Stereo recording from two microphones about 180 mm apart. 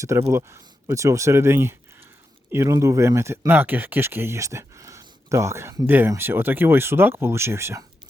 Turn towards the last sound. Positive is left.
turn(degrees=-15)  # may be behind; listen again after turning